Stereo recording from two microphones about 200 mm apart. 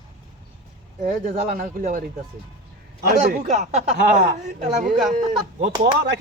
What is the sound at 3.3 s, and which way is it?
Speech, 35° right (ahead or behind).